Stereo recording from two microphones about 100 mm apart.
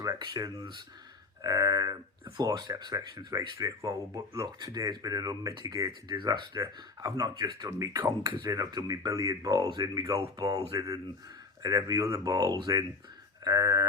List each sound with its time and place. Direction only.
0.2 s speech: 45° right (ahead or behind)
6.1 s speech: 50° right (ahead or behind)